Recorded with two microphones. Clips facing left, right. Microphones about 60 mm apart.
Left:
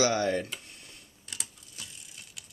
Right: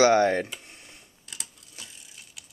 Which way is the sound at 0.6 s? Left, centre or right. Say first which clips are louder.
Right 2 dB; right.